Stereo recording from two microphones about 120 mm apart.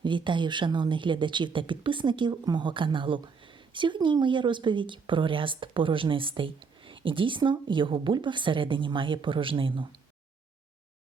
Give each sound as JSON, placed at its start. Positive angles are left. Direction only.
{"t": 0.0, "sound": "speech", "side_deg": -40}